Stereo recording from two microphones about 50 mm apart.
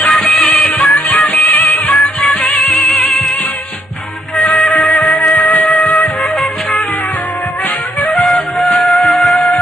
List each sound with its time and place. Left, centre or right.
0.0 s music: centre
0.7 s music: left
2.2 s music: centre
4.4 s music: centre
8.0 s music: centre
8.4 s music: centre
9.0 s music: centre